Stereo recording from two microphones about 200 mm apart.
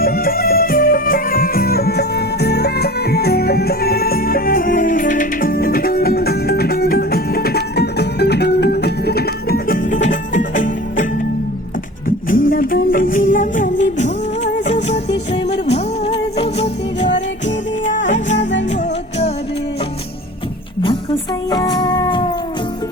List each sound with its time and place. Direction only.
0.0 s music: 45° left (ahead or behind)
12.0 s music: 45° left (ahead or behind)
21.5 s music: 20° left (ahead or behind)